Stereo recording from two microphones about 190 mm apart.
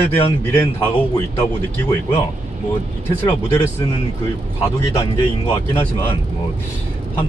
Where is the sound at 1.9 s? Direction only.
15° left (ahead or behind).